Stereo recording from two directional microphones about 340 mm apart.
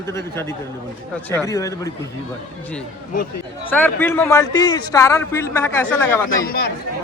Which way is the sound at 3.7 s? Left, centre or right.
Centre.